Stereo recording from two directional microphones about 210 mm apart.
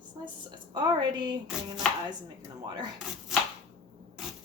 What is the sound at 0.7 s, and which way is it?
Speech, 20° right (ahead or behind).